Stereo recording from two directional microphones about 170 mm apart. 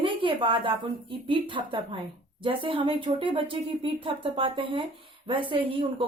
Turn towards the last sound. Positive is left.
turn(degrees=-30)  # may be behind; listen again after turning